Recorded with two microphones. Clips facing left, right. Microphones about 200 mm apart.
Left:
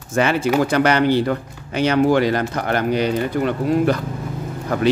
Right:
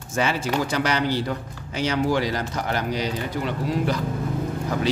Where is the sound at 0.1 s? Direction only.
60° left (ahead or behind).